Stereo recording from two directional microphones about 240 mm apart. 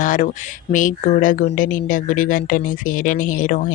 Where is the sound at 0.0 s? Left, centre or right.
Left.